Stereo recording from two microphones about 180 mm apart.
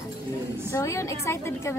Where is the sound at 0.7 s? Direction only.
15° left (ahead or behind).